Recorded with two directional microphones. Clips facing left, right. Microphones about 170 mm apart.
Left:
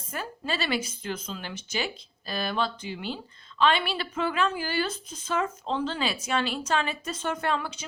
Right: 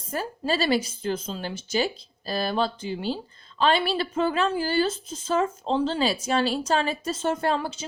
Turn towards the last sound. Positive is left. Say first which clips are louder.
# right 4 dB
turn(degrees=-30)  # may be behind; listen again after turning